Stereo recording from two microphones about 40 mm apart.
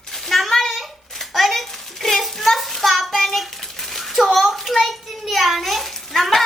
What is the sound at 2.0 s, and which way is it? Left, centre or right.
Child singing, centre.